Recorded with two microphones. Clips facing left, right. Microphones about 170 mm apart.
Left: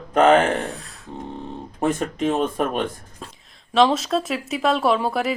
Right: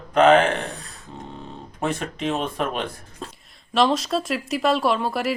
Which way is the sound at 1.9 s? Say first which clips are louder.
Left 4 dB; 45° left (ahead or behind).